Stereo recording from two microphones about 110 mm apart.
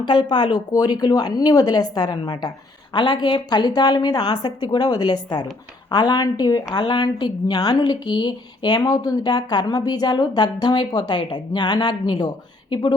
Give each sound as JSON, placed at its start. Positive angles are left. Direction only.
{"t": 0.0, "sound": "speech", "side_deg": 40}
{"t": 0.7, "sound": "a woman's voice", "side_deg": 35}